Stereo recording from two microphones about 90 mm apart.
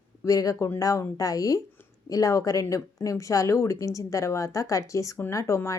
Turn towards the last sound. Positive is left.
turn(degrees=30)  # may be behind; listen again after turning